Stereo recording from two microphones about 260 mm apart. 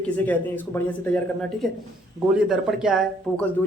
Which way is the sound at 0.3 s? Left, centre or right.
Centre.